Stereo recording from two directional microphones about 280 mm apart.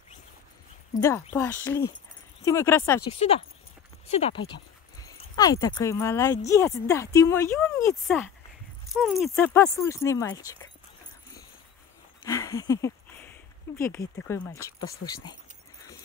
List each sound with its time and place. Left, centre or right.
1.3 s speech: centre
3.2 s speech: left
4.1 s dog: left
5.3 s speech: centre
12.3 s speech: centre